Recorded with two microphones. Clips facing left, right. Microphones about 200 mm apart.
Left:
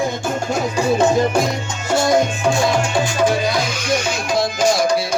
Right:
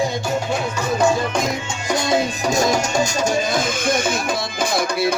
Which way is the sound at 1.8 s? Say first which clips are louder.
Left 4 dB; 20° right (ahead or behind).